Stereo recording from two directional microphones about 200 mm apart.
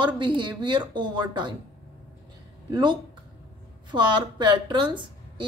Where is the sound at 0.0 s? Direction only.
25° right (ahead or behind).